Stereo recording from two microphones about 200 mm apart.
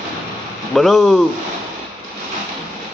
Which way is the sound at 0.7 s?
Centre (ahead or behind).